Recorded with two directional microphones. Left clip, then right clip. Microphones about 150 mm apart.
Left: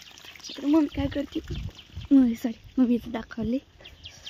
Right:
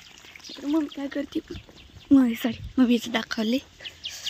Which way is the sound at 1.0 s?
45° left (ahead or behind).